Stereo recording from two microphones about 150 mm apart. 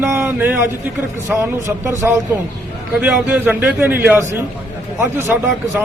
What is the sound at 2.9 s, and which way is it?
Speech, 10° right (ahead or behind).